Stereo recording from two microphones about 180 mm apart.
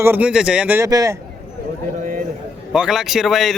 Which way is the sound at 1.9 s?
50° right (ahead or behind).